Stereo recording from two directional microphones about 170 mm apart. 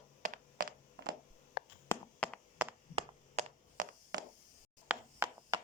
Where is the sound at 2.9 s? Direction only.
35° right (ahead or behind).